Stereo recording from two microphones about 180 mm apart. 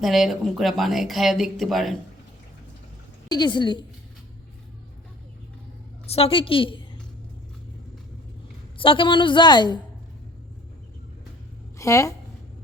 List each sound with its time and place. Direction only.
0.0 s speech: centre (ahead or behind)
3.2 s a woman's voice: 25° left (ahead or behind)
6.1 s a woman's voice: 30° left (ahead or behind)
8.8 s a woman's voice: 30° left (ahead or behind)
11.8 s a woman's voice: 15° left (ahead or behind)